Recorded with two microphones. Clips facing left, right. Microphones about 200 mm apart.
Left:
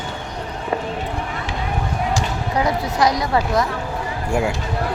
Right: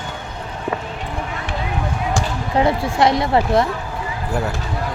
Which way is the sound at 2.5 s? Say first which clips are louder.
Right 4 dB; 25° right (ahead or behind).